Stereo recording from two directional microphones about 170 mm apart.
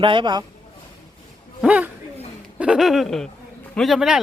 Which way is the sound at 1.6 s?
5° right (ahead or behind).